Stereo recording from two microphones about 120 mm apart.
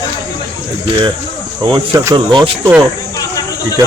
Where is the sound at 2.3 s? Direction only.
50° right (ahead or behind).